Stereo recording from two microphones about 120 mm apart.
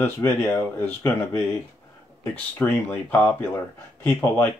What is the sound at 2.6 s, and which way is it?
Speech, 15° left (ahead or behind).